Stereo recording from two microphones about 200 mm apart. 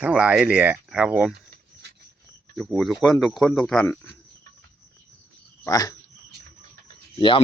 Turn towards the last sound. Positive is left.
turn(degrees=25)  # may be behind; listen again after turning